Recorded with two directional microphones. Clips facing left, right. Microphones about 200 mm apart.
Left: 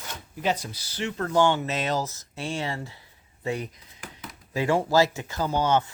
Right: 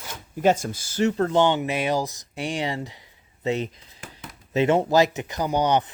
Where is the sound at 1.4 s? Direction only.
20° right (ahead or behind).